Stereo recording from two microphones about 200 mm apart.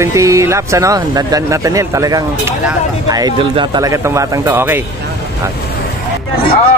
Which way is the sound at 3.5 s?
20° right (ahead or behind).